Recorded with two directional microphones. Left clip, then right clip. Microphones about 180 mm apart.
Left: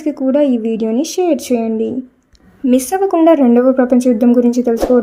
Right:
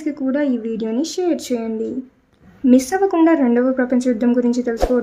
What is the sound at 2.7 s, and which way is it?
A woman's voice, 30° left (ahead or behind).